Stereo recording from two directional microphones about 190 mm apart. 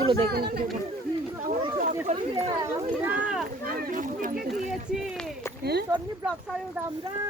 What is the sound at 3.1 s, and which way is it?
Speech, 5° right (ahead or behind).